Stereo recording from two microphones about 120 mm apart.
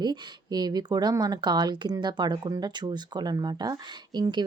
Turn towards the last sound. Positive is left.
turn(degrees=-35)  # may be behind; listen again after turning